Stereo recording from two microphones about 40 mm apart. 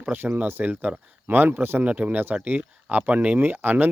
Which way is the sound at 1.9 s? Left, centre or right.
Right.